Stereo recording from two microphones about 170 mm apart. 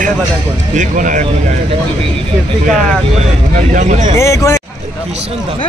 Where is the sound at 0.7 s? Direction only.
50° right (ahead or behind).